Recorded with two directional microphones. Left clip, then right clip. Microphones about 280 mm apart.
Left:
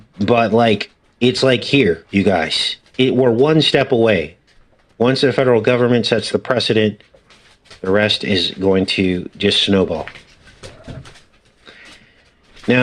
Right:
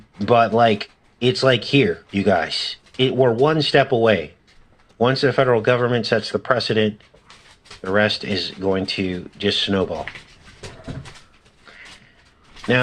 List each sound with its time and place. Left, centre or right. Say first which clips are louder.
0.2 s speech: left 1 dB; left